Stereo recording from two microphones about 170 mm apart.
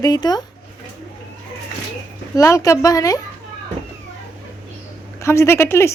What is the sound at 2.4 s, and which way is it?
Speech, 20° left (ahead or behind).